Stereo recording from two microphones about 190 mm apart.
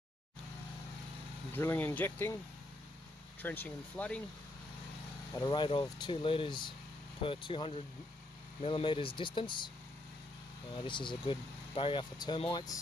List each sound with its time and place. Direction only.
1.5 s speech: 10° left (ahead or behind)
3.4 s speech: 10° left (ahead or behind)
5.3 s speech: 20° left (ahead or behind)
10.9 s speech: 25° left (ahead or behind)